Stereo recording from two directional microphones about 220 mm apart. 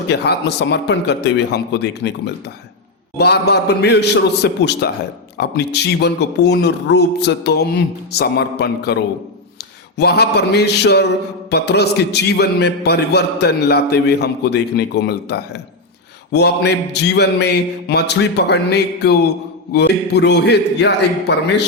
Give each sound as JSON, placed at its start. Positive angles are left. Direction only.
{"t": 0.1, "sound": "a man's voice", "side_deg": 50}
{"t": 10.0, "sound": "a man's voice", "side_deg": 50}